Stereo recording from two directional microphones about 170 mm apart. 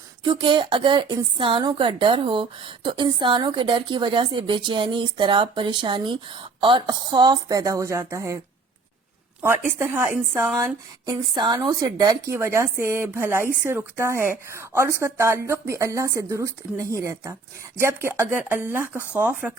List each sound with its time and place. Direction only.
0.3 s a woman's voice: 25° right (ahead or behind)
9.4 s speech: 15° right (ahead or behind)